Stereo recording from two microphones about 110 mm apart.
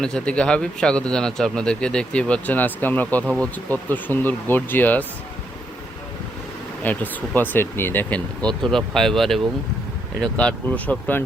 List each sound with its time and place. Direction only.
0.0 s speech: 10° left (ahead or behind)
6.8 s speech: 15° left (ahead or behind)
8.4 s speech: 5° left (ahead or behind)